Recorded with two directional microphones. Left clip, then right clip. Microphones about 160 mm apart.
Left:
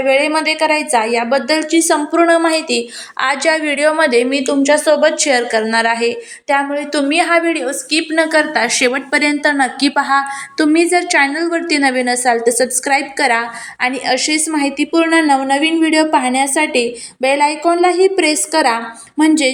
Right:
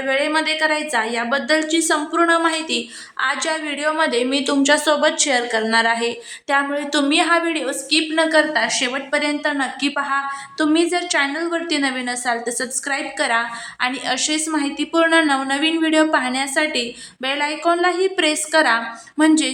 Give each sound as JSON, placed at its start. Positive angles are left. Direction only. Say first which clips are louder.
{"t": 0.1, "sound": "a woman's voice", "louder": "left 4 dB", "side_deg": 15}
{"t": 4.4, "sound": "a woman's voice", "louder": "left 4 dB", "side_deg": 0}